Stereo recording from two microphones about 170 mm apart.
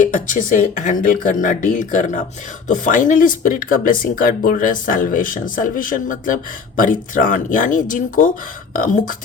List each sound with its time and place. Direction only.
0.0 s speech: 50° left (ahead or behind)